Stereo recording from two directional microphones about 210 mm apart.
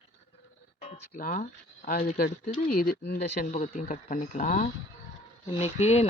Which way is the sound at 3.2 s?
35° left (ahead or behind).